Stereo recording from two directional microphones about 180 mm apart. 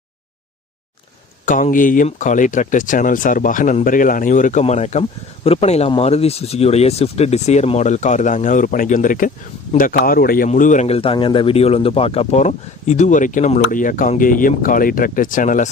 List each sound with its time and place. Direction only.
1.5 s speech: 45° left (ahead or behind)
9.9 s a man's voice: 60° left (ahead or behind)